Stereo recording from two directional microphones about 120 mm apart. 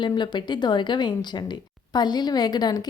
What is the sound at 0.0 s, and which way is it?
Speech, 40° left (ahead or behind).